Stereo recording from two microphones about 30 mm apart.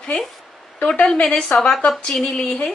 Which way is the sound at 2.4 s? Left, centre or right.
Left.